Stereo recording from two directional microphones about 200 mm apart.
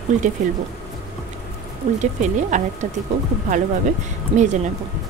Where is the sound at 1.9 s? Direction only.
35° right (ahead or behind).